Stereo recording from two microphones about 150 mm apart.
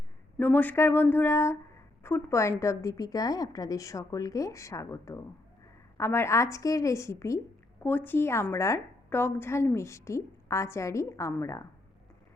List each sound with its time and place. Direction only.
0.3 s a woman's voice: 10° left (ahead or behind)